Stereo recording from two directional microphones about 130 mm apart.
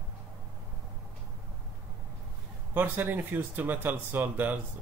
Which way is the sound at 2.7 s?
15° right (ahead or behind).